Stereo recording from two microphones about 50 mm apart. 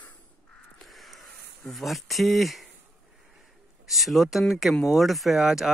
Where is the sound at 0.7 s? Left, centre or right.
Centre.